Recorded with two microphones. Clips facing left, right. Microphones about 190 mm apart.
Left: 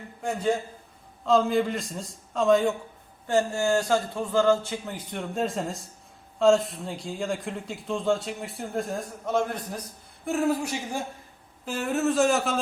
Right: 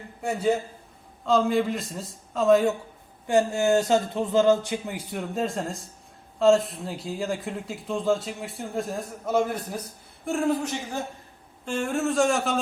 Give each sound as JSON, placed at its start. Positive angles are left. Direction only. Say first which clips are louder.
{"t": 0.2, "sound": "speech", "louder": "right 2 dB", "side_deg": -10}
{"t": 3.2, "sound": "speech", "louder": "right 2 dB", "side_deg": -15}
{"t": 10.2, "sound": "speech", "louder": "even", "side_deg": 5}